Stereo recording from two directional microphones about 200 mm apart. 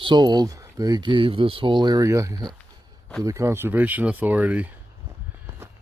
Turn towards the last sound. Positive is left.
turn(degrees=-5)  # may be behind; listen again after turning